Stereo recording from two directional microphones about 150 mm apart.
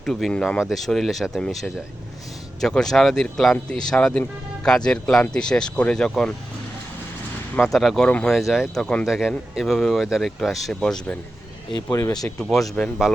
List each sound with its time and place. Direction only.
0.0 s speech: 5° left (ahead or behind)
7.7 s speech: centre (ahead or behind)
11.9 s speech: 20° left (ahead or behind)
12.4 s speech: centre (ahead or behind)